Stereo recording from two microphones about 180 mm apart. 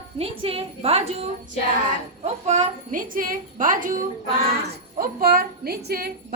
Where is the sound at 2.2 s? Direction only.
35° right (ahead or behind).